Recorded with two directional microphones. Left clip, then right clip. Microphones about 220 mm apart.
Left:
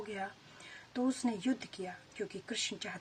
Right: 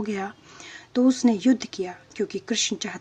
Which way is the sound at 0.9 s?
35° right (ahead or behind).